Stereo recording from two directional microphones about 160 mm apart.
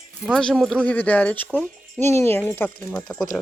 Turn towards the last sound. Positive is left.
turn(degrees=0)  # may be behind; listen again after turning